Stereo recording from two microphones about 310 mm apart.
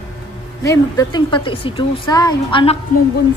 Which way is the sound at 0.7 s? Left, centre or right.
Centre.